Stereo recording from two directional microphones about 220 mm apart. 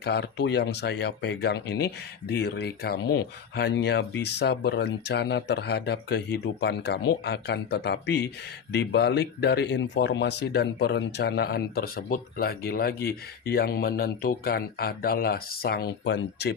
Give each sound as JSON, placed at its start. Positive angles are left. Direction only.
{"t": 0.0, "sound": "speech", "side_deg": 50}